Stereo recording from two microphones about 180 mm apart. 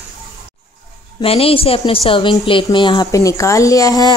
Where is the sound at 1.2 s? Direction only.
30° left (ahead or behind).